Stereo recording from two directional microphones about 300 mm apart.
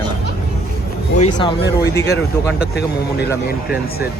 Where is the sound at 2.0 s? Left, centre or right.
Left.